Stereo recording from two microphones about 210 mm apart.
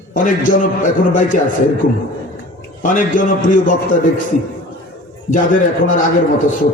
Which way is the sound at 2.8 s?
40° left (ahead or behind).